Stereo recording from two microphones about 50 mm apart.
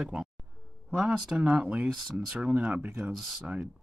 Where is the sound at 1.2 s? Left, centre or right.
Centre.